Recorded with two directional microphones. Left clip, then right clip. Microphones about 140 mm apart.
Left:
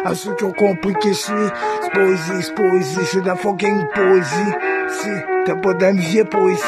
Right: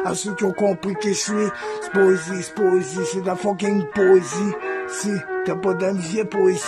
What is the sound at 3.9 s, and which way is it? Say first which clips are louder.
Speech: even; 55° left (ahead or behind).